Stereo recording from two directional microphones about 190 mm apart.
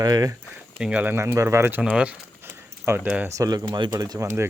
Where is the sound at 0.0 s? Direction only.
20° right (ahead or behind).